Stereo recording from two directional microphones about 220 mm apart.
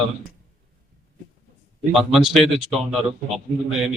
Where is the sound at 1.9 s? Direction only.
Centre (ahead or behind).